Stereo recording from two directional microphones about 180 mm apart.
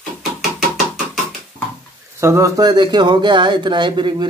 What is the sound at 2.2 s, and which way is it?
Speech, 15° right (ahead or behind).